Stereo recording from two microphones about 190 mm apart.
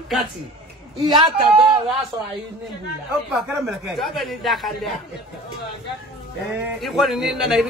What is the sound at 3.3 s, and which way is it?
A man's voice, centre (ahead or behind).